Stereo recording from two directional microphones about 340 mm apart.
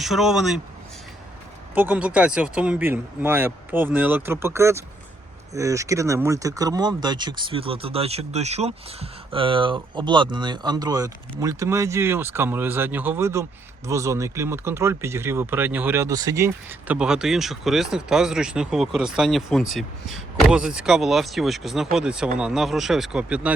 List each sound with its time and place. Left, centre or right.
0.0 s speech: centre
1.7 s speech: centre